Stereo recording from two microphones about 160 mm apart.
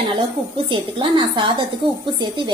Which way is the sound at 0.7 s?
30° right (ahead or behind).